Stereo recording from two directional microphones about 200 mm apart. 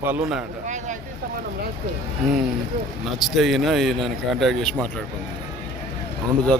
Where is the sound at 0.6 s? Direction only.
35° right (ahead or behind).